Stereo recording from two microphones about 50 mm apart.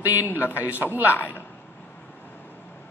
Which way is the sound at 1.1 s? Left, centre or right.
Left.